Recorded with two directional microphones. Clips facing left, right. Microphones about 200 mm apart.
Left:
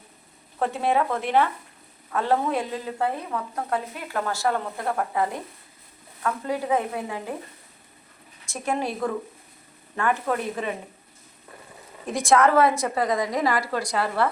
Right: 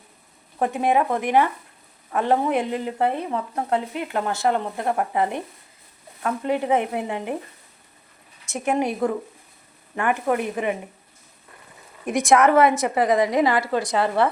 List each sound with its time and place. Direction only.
0.6 s speech: 15° right (ahead or behind)
8.4 s speech: 20° right (ahead or behind)
12.0 s speech: 20° right (ahead or behind)